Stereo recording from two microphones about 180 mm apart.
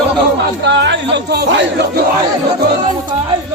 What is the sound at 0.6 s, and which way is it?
Speech, 75° right (ahead or behind).